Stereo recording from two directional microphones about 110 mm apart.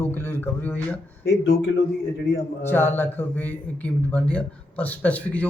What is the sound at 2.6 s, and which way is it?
Speech, 20° left (ahead or behind).